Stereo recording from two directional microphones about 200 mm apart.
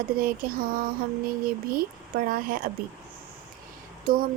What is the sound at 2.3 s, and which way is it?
Speech, 45° right (ahead or behind).